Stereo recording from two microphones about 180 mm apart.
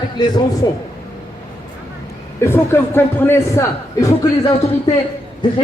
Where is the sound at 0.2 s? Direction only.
25° left (ahead or behind).